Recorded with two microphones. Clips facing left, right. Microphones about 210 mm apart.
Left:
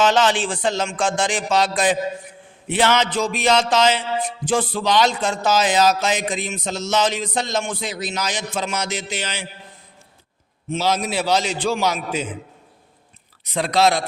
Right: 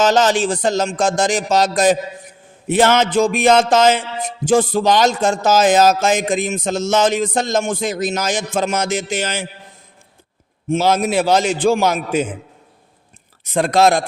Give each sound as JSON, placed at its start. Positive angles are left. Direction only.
{"t": 0.0, "sound": "speech", "side_deg": -40}
{"t": 2.6, "sound": "music", "side_deg": -45}
{"t": 10.7, "sound": "music", "side_deg": -50}
{"t": 13.4, "sound": "music", "side_deg": -50}